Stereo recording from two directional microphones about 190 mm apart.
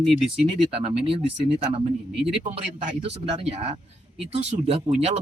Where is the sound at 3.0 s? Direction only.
30° right (ahead or behind).